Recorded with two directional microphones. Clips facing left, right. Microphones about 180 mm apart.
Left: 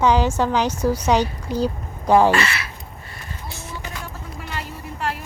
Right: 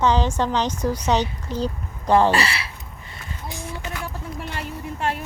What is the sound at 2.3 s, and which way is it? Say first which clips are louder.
Speech: left 1 dB; 35° right (ahead or behind).